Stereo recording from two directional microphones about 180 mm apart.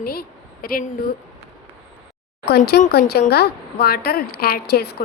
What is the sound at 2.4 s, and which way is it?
A woman's voice, 60° left (ahead or behind).